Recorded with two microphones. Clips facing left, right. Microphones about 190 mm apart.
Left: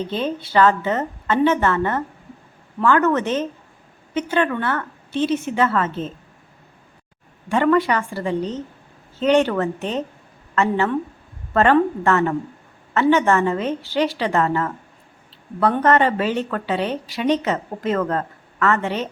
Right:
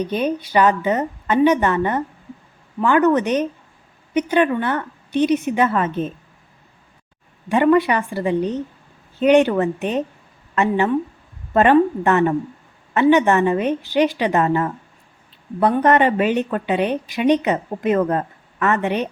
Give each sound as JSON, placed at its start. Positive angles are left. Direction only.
{"t": 0.0, "sound": "a woman's voice", "side_deg": -15}
{"t": 7.5, "sound": "a woman's voice", "side_deg": -15}